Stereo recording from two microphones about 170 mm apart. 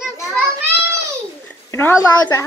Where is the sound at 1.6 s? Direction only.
15° left (ahead or behind).